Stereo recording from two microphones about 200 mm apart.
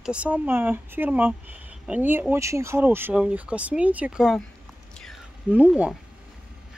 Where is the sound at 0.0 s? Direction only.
5° right (ahead or behind).